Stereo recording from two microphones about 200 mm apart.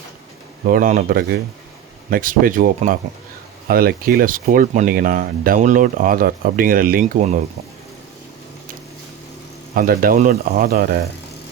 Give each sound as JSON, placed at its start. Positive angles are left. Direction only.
{"t": 0.6, "sound": "speech", "side_deg": -40}
{"t": 9.7, "sound": "speech", "side_deg": -45}